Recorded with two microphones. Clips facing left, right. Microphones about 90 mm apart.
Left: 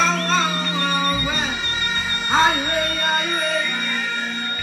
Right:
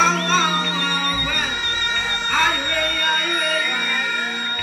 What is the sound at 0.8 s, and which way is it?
Music, 20° left (ahead or behind).